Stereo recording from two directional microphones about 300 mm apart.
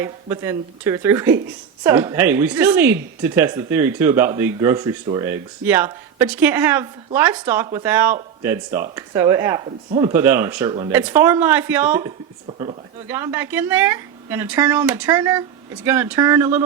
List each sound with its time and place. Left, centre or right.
0.0 s speech: centre
10.1 s speech: centre